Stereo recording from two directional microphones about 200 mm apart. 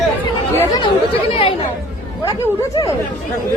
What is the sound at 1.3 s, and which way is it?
Speech, 30° left (ahead or behind).